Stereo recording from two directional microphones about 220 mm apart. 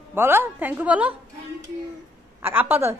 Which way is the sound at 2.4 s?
10° right (ahead or behind).